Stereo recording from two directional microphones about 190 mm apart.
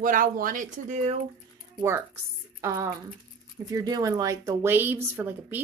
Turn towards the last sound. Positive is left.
turn(degrees=-10)  # may be behind; listen again after turning